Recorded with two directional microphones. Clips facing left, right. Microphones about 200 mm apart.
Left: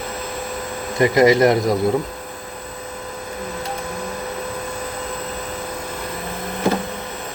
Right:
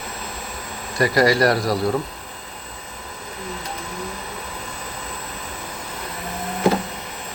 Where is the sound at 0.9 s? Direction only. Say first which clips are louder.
Left 4 dB; 20° left (ahead or behind).